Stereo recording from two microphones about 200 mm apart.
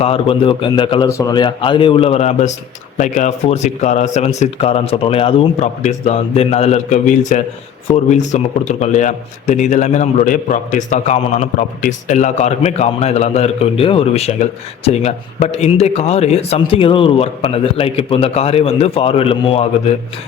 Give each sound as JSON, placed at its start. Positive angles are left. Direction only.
{"t": 0.0, "sound": "a man's voice", "side_deg": 30}